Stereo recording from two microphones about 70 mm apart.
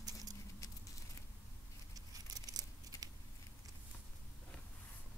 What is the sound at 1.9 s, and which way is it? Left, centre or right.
Tearing, right.